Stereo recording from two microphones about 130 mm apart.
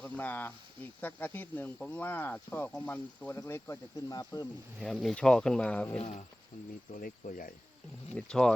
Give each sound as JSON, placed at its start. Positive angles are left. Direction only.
{"t": 0.0, "sound": "speech", "side_deg": 10}
{"t": 4.8, "sound": "speech", "side_deg": 0}
{"t": 6.0, "sound": "speech", "side_deg": 60}
{"t": 6.9, "sound": "speech", "side_deg": 90}
{"t": 8.1, "sound": "speech", "side_deg": 5}